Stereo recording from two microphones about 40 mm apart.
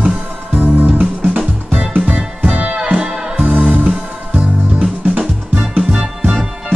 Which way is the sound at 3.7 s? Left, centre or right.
Right.